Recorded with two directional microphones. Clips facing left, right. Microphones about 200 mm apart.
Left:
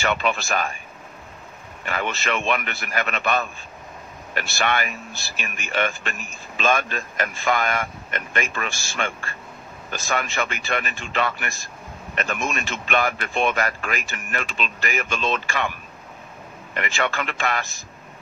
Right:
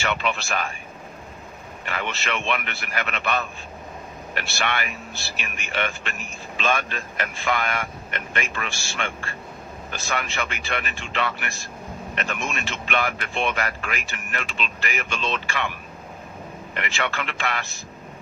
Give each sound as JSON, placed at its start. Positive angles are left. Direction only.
{"t": 0.0, "sound": "speech", "side_deg": 45}
{"t": 1.9, "sound": "speech", "side_deg": 45}
{"t": 16.7, "sound": "speech", "side_deg": 45}